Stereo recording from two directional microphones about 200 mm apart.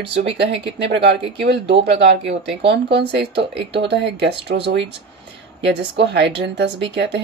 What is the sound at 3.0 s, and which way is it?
Speech, 55° right (ahead or behind).